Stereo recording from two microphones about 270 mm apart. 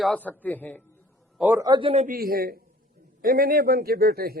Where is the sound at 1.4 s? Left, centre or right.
Centre.